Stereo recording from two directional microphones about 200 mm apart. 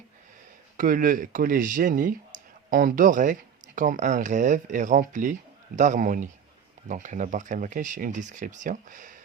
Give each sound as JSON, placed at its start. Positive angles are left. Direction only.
{"t": 0.8, "sound": "speech", "side_deg": -45}